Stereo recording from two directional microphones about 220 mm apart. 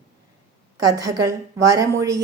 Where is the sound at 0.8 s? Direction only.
15° right (ahead or behind).